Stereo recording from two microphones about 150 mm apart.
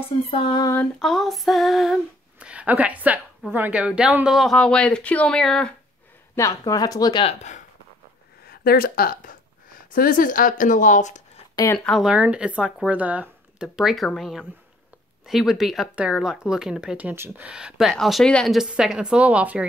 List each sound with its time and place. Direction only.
0.3 s speech: 30° left (ahead or behind)
0.7 s a woman's voice: centre (ahead or behind)
6.3 s speech: 20° left (ahead or behind)
7.2 s speech: 50° left (ahead or behind)
8.5 s speech: 90° left; by 11.2 s 55° left (ahead or behind)
11.5 s speech: 20° left (ahead or behind)
11.8 s speech: centre (ahead or behind)